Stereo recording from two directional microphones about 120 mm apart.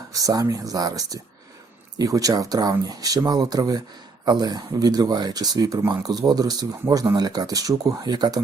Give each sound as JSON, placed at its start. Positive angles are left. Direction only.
{"t": 0.1, "sound": "speech", "side_deg": -30}